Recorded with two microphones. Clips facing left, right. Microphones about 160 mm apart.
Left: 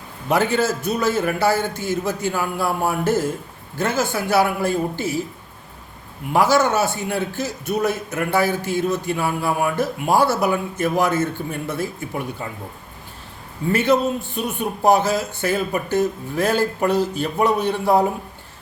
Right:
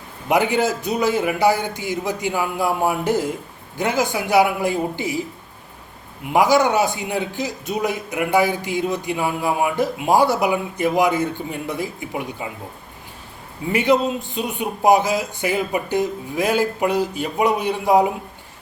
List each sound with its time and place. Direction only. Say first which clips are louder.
0.3 s a man's voice: right 1 dB; 15° right (ahead or behind)
6.3 s a man's voice: right 1 dB; 15° right (ahead or behind)
13.7 s a man's voice: even; 15° right (ahead or behind)